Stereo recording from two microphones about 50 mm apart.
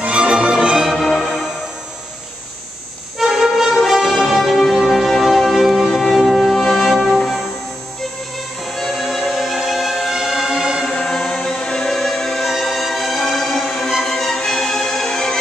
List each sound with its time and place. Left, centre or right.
0.0 s music: right
3.2 s music: centre
8.6 s music: centre
11.0 s music: centre